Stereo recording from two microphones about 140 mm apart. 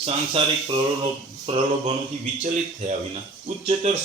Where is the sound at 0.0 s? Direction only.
40° right (ahead or behind).